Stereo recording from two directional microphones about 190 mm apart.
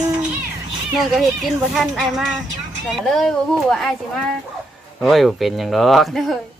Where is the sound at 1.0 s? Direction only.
Centre (ahead or behind).